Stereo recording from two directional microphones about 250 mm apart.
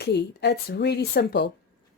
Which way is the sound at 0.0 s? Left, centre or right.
Left.